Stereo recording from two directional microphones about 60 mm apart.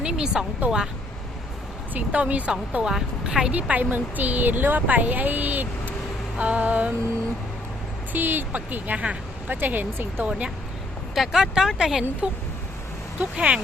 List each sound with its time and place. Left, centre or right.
0.0 s a sound: centre
0.6 s speech: right
1.9 s speech: right; by 3.5 s centre
3.5 s speech: right
8.1 s speech: right
10.2 s speech: centre
11.1 s speech: centre
13.1 s speech: centre